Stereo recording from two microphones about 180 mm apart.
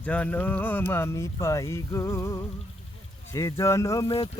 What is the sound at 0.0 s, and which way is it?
Speech, 5° left (ahead or behind).